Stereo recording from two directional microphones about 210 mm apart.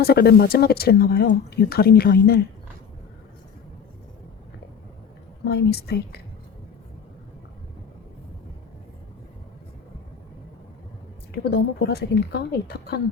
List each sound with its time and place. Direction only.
0.0 s speech: 50° left (ahead or behind)
5.5 s speech: 50° left (ahead or behind)
11.4 s speech: 50° left (ahead or behind)